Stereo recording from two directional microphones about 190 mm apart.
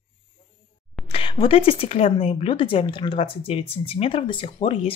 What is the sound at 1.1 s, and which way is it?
A woman's voice, 25° left (ahead or behind).